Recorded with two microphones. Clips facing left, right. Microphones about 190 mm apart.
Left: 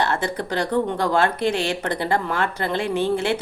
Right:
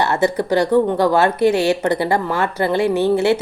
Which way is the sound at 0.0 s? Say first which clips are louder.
Right 6 dB; 10° right (ahead or behind).